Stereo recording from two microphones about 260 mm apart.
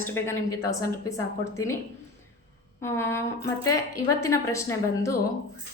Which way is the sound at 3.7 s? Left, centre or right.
Left.